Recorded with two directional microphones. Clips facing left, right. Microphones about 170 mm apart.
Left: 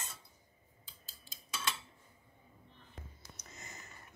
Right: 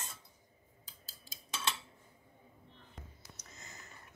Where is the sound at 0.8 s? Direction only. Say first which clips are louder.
Right 1 dB; 40° right (ahead or behind).